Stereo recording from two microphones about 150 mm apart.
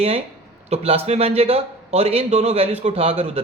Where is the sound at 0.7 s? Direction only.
45° right (ahead or behind).